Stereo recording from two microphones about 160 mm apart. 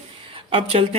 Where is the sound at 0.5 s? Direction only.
35° right (ahead or behind).